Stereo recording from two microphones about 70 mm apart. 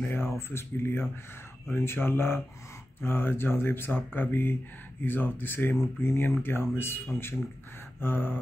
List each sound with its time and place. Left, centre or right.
0.1 s speech: left